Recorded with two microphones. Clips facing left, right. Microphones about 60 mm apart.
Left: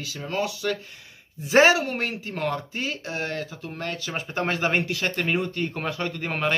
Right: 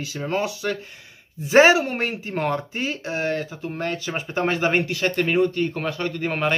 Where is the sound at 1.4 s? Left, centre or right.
Centre.